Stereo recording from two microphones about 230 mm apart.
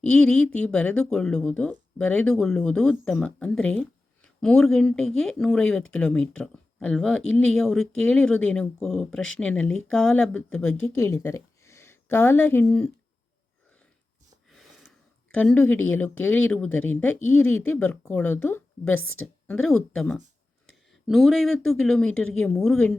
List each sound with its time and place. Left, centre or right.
0.0 s speech: centre
14.5 s a sound: centre
15.4 s speech: centre
18.9 s a woman's voice: left
19.5 s speech: centre